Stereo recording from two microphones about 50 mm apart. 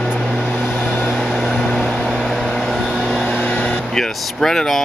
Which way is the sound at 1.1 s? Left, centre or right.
Centre.